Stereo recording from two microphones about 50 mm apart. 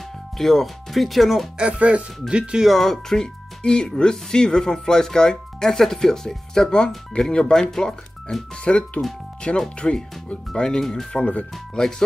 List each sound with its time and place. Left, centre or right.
0.4 s speech: centre
1.6 s speech: right
2.7 s speech: centre
8.6 s speech: left